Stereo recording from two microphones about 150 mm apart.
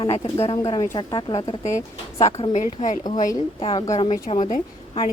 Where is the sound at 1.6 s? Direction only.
50° left (ahead or behind).